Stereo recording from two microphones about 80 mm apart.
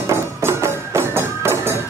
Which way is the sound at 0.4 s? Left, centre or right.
Right.